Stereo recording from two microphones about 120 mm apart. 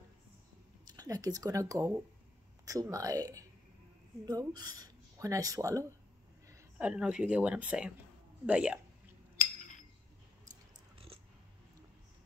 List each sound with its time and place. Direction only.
0.8 s speech: 30° right (ahead or behind)
6.8 s speech: 10° right (ahead or behind)